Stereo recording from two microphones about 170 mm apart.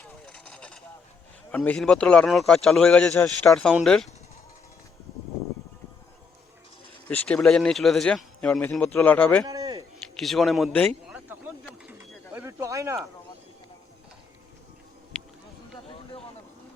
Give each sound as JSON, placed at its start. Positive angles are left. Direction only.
{"t": 0.0, "sound": "vehicle", "side_deg": 5}
{"t": 1.5, "sound": "speech", "side_deg": 10}
{"t": 7.1, "sound": "speech", "side_deg": 10}
{"t": 9.5, "sound": "a sound", "side_deg": -20}
{"t": 10.0, "sound": "a man's voice", "side_deg": 0}
{"t": 11.1, "sound": "a sound", "side_deg": -10}
{"t": 11.9, "sound": "bird", "side_deg": -10}